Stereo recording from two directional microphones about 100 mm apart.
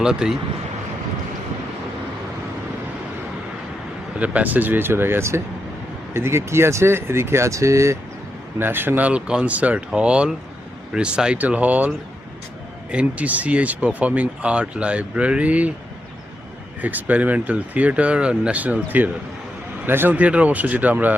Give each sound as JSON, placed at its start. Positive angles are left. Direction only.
{"t": 0.0, "sound": "speech", "side_deg": -5}
{"t": 4.2, "sound": "speech", "side_deg": -15}
{"t": 12.9, "sound": "speech", "side_deg": -10}
{"t": 16.8, "sound": "speech", "side_deg": -15}